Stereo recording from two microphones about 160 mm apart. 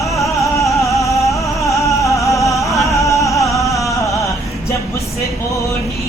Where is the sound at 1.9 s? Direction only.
20° left (ahead or behind).